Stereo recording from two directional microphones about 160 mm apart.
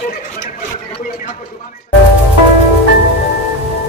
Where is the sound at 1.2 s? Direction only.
55° left (ahead or behind).